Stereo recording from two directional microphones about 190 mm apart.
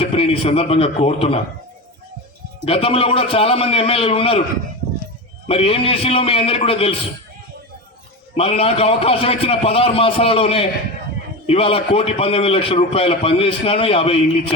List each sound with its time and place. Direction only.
0.0 s a man's voice: 30° left (ahead or behind)
2.6 s a man's voice: 30° left (ahead or behind)
5.5 s a man's voice: 30° left (ahead or behind)
8.4 s a man's voice: 30° left (ahead or behind)